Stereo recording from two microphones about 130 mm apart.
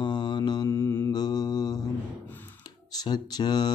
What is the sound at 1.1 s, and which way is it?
Mantra, 30° left (ahead or behind).